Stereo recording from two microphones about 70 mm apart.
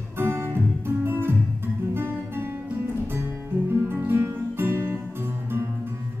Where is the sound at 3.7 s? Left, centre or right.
Right.